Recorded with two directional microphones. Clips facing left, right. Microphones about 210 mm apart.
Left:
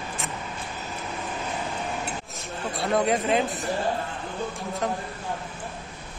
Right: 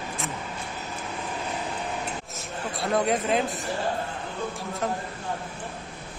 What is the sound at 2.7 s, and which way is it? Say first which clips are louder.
Speech: left 1 dB; centre (ahead or behind).